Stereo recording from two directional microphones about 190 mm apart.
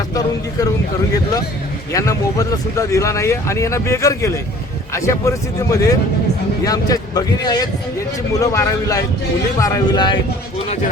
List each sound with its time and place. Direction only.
0.1 s vehicle: 20° left (ahead or behind)
1.9 s speech: 15° left (ahead or behind)